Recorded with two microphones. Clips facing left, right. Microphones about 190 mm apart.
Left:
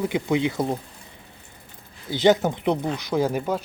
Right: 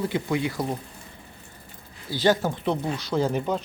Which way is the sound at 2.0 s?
20° left (ahead or behind).